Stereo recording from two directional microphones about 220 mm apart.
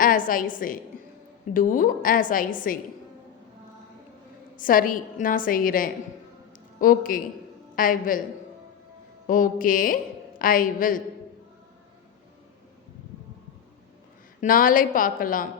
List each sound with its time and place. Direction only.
0.0 s a woman's voice: 40° left (ahead or behind)
4.5 s a woman's voice: 40° left (ahead or behind)
9.2 s a woman's voice: 40° left (ahead or behind)
14.4 s a woman's voice: 40° left (ahead or behind)